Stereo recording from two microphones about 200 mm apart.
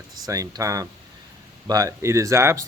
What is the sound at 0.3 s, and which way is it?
Speech, 15° right (ahead or behind).